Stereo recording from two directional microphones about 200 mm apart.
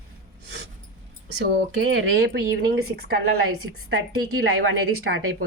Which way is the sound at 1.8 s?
75° right (ahead or behind).